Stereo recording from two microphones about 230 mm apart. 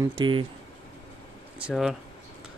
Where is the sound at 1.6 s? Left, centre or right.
Centre.